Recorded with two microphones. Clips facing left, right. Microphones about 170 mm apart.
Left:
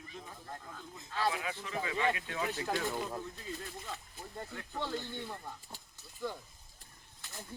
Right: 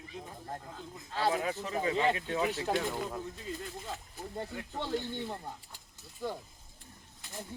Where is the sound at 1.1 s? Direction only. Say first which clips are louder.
Right 4 dB; 35° right (ahead or behind).